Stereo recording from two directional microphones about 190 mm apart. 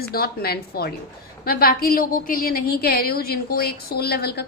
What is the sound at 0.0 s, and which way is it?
A woman's voice, 55° left (ahead or behind).